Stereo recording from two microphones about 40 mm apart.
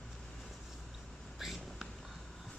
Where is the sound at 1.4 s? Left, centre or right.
Centre.